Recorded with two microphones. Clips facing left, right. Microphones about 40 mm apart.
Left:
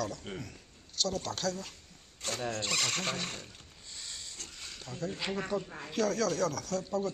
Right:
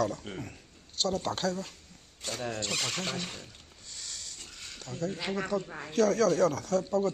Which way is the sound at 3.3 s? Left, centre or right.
Left.